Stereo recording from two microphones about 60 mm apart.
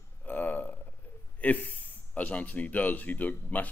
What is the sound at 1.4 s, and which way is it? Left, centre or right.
A man's voice, left.